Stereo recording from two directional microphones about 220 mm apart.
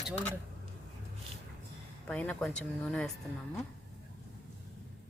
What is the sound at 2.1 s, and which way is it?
Speech, 5° left (ahead or behind).